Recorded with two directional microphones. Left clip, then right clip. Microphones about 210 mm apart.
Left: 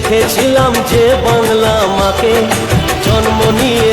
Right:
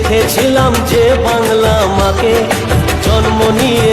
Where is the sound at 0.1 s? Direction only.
Centre (ahead or behind).